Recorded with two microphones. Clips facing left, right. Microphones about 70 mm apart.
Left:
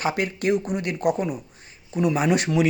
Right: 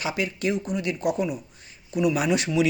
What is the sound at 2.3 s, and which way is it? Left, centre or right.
Speech, left.